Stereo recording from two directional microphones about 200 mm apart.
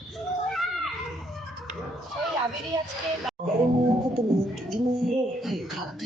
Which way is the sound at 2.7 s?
20° right (ahead or behind).